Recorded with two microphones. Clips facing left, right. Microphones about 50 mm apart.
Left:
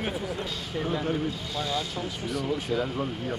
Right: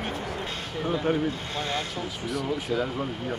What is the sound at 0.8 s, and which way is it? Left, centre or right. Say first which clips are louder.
Speech: right 2 dB; centre.